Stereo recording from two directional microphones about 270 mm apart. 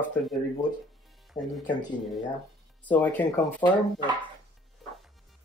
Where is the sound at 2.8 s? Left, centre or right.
Centre.